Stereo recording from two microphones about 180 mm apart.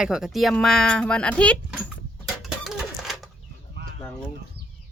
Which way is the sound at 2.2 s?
Centre (ahead or behind).